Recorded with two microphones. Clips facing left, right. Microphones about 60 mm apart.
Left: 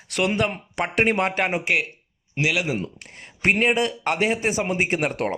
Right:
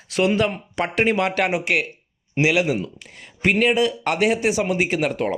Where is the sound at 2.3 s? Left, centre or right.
Centre.